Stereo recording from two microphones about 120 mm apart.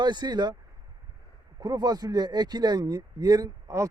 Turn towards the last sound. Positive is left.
turn(degrees=-30)  # may be behind; listen again after turning